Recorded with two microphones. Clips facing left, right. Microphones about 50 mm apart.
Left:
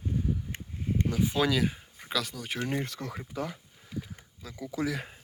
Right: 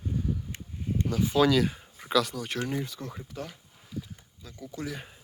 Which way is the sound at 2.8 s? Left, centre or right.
Left.